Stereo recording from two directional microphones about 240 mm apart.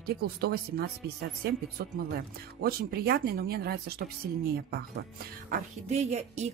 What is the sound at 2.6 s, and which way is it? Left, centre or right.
Speech, right.